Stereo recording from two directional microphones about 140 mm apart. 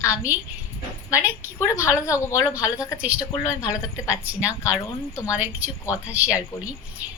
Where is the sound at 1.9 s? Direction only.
20° left (ahead or behind).